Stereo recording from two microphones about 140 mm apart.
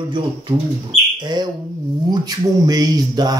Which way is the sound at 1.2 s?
30° right (ahead or behind).